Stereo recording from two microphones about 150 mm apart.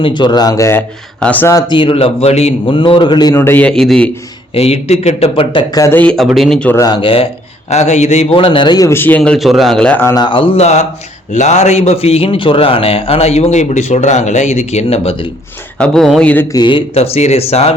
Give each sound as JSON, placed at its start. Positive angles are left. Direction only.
{"t": 0.0, "sound": "speech", "side_deg": 30}
{"t": 1.5, "sound": "a man's voice", "side_deg": 30}
{"t": 3.3, "sound": "a man's voice", "side_deg": 15}
{"t": 4.5, "sound": "a man's voice", "side_deg": 40}
{"t": 5.8, "sound": "a man's voice", "side_deg": 10}
{"t": 6.7, "sound": "a man's voice", "side_deg": 25}
{"t": 7.7, "sound": "a man's voice", "side_deg": 50}
{"t": 8.9, "sound": "a man's voice", "side_deg": 15}
{"t": 10.2, "sound": "a man's voice", "side_deg": 35}
{"t": 15.8, "sound": "speech", "side_deg": 0}
{"t": 16.3, "sound": "a man's voice", "side_deg": 15}
{"t": 16.6, "sound": "a man's voice", "side_deg": 35}